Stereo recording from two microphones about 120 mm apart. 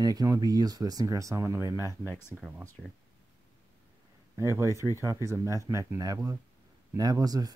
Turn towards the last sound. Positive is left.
turn(degrees=-30)  # may be behind; listen again after turning